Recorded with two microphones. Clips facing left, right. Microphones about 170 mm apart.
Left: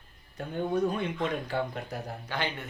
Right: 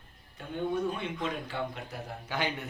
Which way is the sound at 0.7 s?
45° left (ahead or behind).